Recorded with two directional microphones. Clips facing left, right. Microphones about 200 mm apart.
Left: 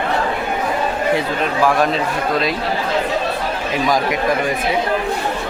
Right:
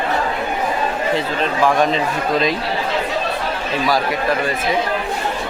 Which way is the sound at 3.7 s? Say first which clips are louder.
Left 1 dB; 15° left (ahead or behind).